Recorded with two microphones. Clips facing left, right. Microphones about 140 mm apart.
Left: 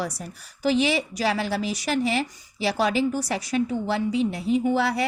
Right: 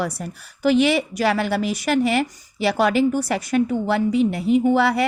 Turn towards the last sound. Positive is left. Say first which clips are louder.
# right 5 dB
turn(degrees=-60)  # may be behind; listen again after turning